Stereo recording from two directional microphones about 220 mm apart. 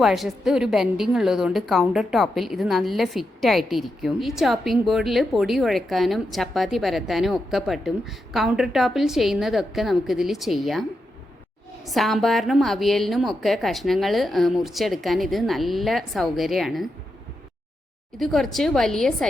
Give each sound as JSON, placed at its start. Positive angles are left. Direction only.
{"t": 0.0, "sound": "a woman's voice", "side_deg": 0}
{"t": 11.9, "sound": "a woman's voice", "side_deg": 0}
{"t": 18.2, "sound": "a woman's voice", "side_deg": 0}